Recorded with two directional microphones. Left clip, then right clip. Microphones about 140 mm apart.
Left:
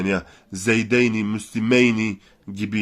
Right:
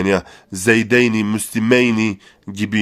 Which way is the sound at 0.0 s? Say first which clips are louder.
Right 7 dB; 65° right (ahead or behind).